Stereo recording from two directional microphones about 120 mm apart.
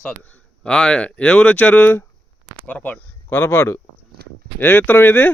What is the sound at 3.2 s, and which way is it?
Speech, 30° left (ahead or behind).